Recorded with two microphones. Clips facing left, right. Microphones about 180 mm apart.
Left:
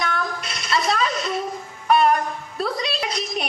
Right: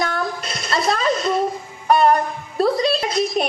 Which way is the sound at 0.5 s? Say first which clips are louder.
Right 1 dB; 45° right (ahead or behind).